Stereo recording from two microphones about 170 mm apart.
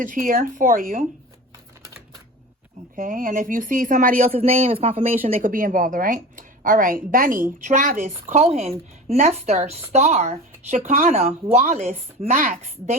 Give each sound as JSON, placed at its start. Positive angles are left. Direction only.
{"t": 0.0, "sound": "a woman's voice", "side_deg": -50}
{"t": 2.9, "sound": "a woman's voice", "side_deg": -50}
{"t": 4.3, "sound": "speech", "side_deg": -35}
{"t": 5.4, "sound": "a woman's voice", "side_deg": -55}
{"t": 11.1, "sound": "a woman's voice", "side_deg": -35}